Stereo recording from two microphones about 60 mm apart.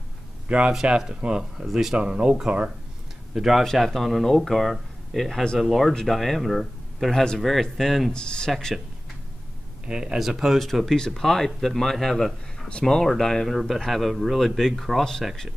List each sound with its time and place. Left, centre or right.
0.5 s speech: centre
2.0 s speech: centre
5.6 s speech: centre
9.8 s speech: centre
10.1 s speech: centre